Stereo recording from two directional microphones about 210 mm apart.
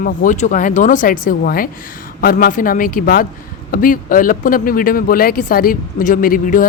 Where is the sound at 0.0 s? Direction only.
40° left (ahead or behind).